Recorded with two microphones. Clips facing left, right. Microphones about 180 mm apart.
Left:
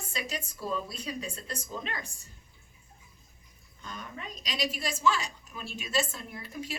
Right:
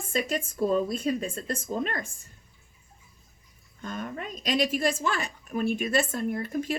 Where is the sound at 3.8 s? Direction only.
50° right (ahead or behind).